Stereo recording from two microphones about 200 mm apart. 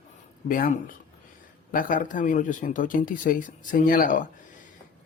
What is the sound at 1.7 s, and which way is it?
Speech, 40° left (ahead or behind).